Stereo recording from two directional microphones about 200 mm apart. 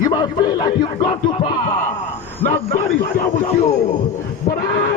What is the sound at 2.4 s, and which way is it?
A man's voice, 40° left (ahead or behind).